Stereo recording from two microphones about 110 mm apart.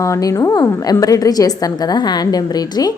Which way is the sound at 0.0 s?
30° left (ahead or behind).